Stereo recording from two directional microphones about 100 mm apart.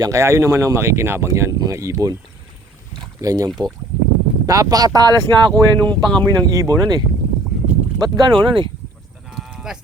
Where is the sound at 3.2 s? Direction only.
35° right (ahead or behind).